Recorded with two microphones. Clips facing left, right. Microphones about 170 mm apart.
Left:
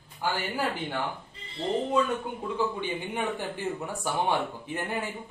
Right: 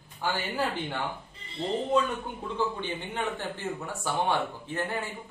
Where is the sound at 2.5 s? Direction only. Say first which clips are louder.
Left 1 dB; 10° left (ahead or behind).